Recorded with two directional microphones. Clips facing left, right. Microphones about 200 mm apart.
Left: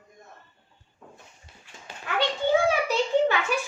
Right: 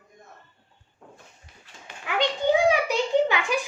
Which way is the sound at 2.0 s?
15° right (ahead or behind).